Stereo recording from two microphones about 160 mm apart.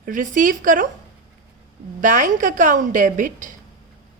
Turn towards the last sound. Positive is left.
turn(degrees=-55)  # may be behind; listen again after turning